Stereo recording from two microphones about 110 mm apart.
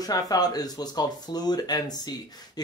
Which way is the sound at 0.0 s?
35° left (ahead or behind).